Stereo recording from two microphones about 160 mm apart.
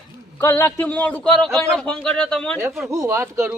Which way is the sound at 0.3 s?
15° left (ahead or behind).